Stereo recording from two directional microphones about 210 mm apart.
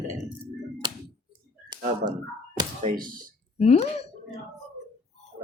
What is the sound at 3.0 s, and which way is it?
Speech, 40° right (ahead or behind).